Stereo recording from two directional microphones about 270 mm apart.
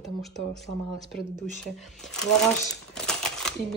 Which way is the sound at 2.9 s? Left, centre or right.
Centre.